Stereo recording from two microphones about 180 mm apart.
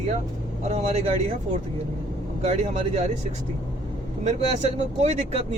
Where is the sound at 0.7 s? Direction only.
35° right (ahead or behind).